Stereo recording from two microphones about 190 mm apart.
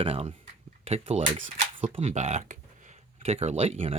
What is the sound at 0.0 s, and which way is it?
Speech, 30° right (ahead or behind).